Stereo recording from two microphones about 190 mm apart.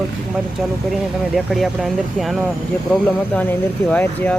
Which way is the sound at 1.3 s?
Centre (ahead or behind).